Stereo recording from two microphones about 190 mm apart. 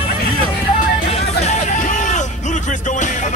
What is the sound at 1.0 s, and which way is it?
Music, 35° left (ahead or behind).